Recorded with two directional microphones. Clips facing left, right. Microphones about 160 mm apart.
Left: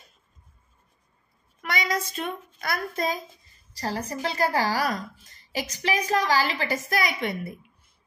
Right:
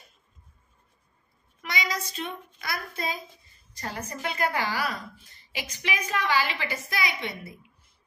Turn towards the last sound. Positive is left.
turn(degrees=50)  # may be behind; listen again after turning